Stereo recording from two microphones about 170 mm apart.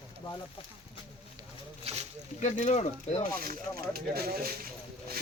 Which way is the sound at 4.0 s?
60° right (ahead or behind).